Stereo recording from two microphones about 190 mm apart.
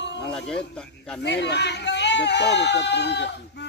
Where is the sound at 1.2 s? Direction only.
65° left (ahead or behind).